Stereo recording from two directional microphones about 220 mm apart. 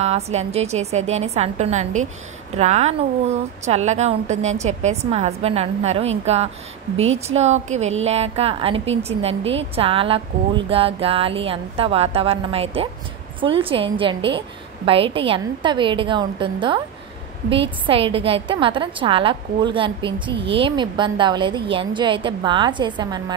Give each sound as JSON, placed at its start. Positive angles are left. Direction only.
{"t": 0.0, "sound": "a woman's voice", "side_deg": -30}